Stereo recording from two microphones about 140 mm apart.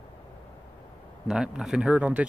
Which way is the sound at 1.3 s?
5° right (ahead or behind).